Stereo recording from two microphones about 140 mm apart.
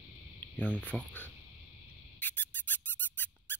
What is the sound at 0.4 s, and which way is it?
Speech, 10° left (ahead or behind).